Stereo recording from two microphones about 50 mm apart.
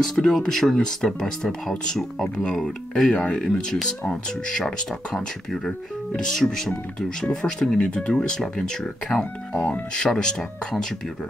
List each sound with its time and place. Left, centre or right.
0.0 s speech: centre
9.1 s speech: left
9.6 s speech: centre